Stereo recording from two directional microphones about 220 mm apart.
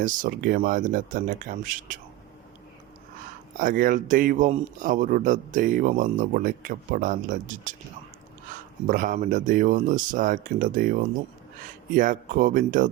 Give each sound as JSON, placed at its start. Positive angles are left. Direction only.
{"t": 0.0, "sound": "speech", "side_deg": -35}
{"t": 3.6, "sound": "speech", "side_deg": -40}
{"t": 11.9, "sound": "speech", "side_deg": -35}